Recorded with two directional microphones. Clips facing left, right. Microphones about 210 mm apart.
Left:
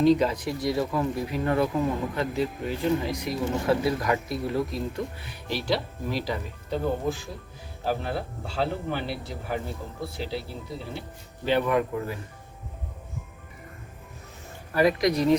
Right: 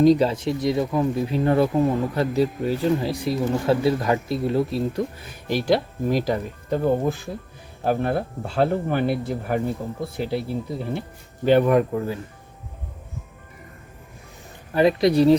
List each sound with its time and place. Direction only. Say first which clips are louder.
0.0 s speech: right 4 dB; 35° right (ahead or behind); by 10.4 s 55° right (ahead or behind)
11.4 s speech: right 7 dB; 45° right (ahead or behind)
14.7 s speech: right 4 dB; 25° right (ahead or behind)